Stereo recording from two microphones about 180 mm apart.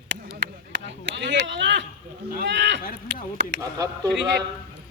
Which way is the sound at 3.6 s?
20° right (ahead or behind).